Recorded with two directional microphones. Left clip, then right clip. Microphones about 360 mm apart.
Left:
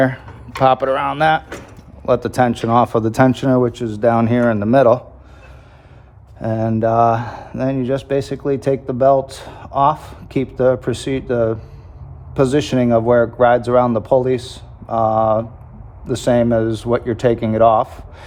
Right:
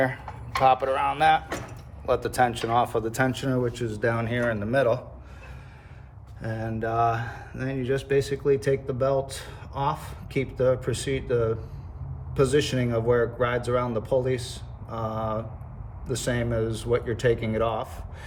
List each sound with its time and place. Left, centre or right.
0.6 s speech: left
6.4 s speech: centre